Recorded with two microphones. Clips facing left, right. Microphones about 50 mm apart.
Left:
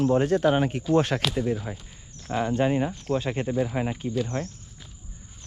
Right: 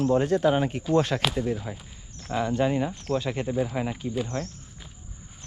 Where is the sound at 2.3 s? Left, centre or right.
Left.